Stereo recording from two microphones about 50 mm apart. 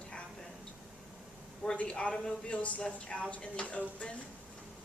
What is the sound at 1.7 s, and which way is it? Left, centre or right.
Speech, left.